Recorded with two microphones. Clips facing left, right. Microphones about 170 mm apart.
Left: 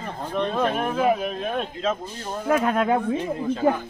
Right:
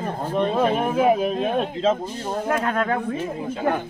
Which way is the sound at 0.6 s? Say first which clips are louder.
Right 2 dB; 15° right (ahead or behind).